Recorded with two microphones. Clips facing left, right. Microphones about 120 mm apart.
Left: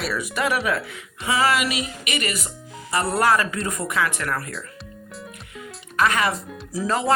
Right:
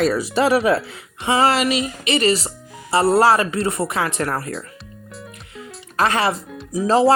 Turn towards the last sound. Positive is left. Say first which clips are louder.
# right 8 dB
turn(degrees=-30)  # may be behind; listen again after turning